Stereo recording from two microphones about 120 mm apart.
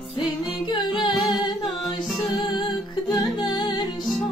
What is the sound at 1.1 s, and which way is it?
Humming, centre (ahead or behind).